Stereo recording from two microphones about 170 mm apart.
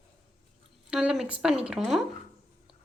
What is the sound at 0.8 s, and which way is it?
Speech, 5° right (ahead or behind).